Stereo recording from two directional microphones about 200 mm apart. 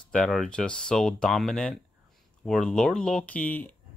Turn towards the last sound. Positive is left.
turn(degrees=10)  # may be behind; listen again after turning